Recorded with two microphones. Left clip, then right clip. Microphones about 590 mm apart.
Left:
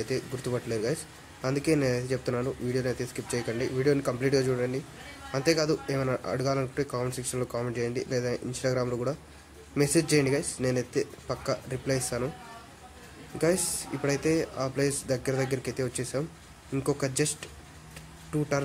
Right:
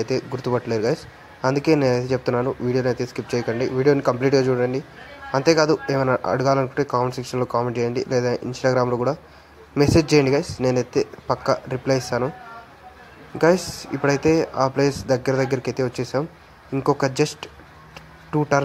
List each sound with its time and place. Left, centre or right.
0.0 s speech: left
14.0 s speech: left